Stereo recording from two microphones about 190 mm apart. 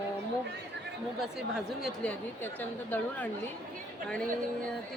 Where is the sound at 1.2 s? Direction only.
Centre (ahead or behind).